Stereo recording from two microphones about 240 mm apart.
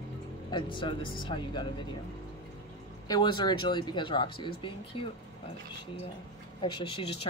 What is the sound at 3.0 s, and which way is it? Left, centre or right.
Speech, centre.